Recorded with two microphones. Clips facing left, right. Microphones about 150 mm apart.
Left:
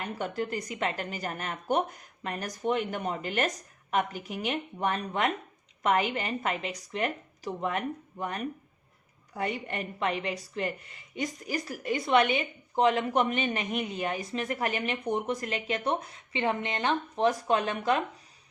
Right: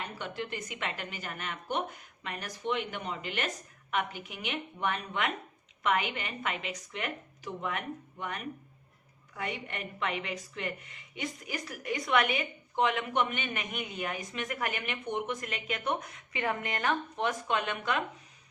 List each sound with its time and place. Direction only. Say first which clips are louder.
0.2 s a woman's voice: left 8 dB; 40° left (ahead or behind)